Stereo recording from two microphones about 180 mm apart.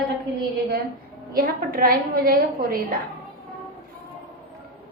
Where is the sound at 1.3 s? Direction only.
55° right (ahead or behind).